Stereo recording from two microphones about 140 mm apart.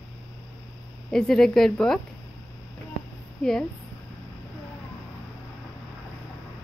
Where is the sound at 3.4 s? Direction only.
5° left (ahead or behind).